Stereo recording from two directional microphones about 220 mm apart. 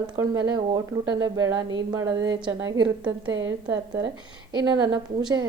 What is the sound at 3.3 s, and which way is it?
Speech, 55° right (ahead or behind).